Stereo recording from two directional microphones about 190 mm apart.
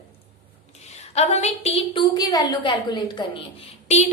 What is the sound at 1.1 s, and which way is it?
A woman's voice, 35° left (ahead or behind).